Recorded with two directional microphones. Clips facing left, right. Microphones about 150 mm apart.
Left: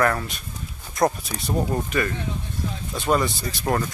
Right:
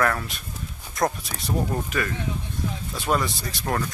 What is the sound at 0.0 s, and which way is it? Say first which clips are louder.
Speech: left 2 dB; 5° left (ahead or behind).